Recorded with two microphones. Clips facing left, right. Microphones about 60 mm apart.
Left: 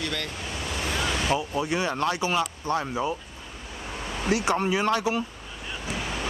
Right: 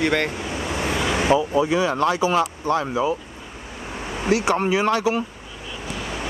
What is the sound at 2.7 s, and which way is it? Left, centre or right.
Speech, right.